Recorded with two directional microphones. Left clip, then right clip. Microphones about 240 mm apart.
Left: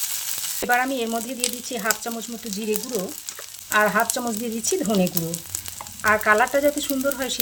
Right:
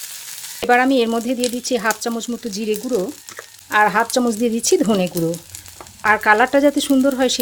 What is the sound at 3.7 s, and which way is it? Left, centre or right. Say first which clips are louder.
Speech: right 4 dB; right.